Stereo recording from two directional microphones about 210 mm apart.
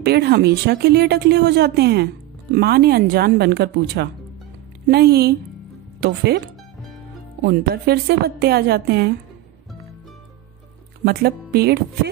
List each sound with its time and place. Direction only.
0.0 s speech: 50° right (ahead or behind)
7.4 s speech: 50° right (ahead or behind)
11.1 s speech: 50° right (ahead or behind)